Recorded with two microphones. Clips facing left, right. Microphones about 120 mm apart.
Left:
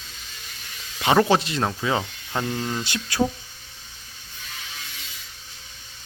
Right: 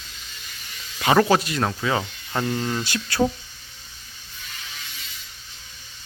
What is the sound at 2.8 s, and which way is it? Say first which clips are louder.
Speech: right 2 dB; 20° left (ahead or behind).